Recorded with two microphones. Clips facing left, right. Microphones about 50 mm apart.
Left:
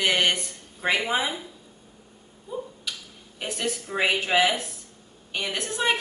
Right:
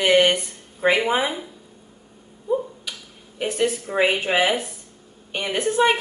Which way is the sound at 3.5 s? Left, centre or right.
Right.